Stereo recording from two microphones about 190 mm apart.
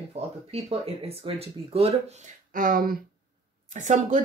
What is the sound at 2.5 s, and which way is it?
Speech, 45° right (ahead or behind).